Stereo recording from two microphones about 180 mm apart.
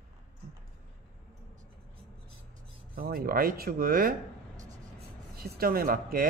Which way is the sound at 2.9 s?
55° right (ahead or behind).